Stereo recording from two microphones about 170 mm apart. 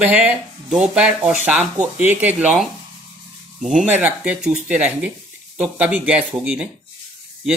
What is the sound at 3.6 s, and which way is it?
Speech, 5° right (ahead or behind).